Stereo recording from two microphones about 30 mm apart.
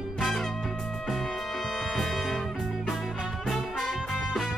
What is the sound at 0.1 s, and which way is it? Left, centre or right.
Music, centre.